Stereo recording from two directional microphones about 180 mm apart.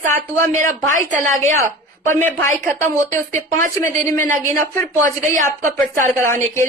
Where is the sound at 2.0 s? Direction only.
15° left (ahead or behind).